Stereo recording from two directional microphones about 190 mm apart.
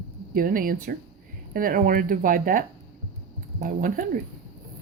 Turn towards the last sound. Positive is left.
turn(degrees=-45)  # may be behind; listen again after turning